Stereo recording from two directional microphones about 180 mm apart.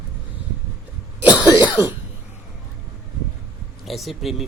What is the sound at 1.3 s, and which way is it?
Cough, 25° left (ahead or behind).